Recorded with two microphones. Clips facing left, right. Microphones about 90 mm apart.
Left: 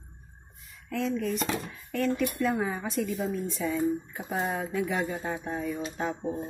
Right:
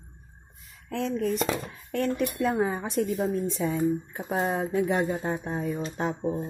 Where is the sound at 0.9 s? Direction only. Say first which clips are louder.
Right 2 dB; 45° right (ahead or behind).